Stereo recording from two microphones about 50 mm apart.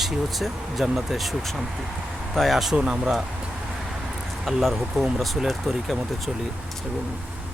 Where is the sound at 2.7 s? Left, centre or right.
Centre.